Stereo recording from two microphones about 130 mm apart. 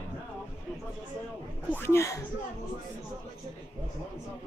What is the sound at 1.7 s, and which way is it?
Speech, 20° left (ahead or behind).